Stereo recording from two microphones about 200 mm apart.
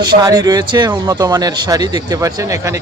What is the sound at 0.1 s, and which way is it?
Speech, 20° right (ahead or behind).